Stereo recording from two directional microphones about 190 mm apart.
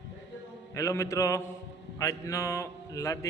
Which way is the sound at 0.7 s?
15° left (ahead or behind).